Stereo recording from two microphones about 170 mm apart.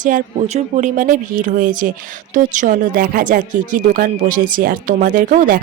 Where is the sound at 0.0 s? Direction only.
50° right (ahead or behind).